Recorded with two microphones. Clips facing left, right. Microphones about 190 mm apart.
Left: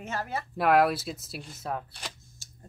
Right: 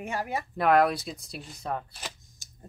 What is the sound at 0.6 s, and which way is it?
Speech, 5° left (ahead or behind).